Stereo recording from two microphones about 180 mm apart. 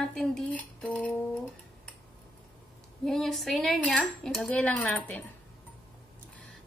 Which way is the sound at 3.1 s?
Centre (ahead or behind).